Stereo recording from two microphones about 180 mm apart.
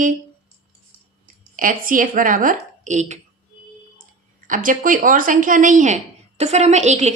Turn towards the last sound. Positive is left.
turn(degrees=-40)  # may be behind; listen again after turning